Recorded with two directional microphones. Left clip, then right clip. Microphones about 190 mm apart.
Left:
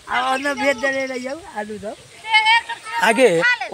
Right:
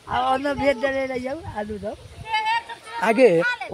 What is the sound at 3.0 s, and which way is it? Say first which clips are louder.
Speech: left 2 dB; 10° right (ahead or behind).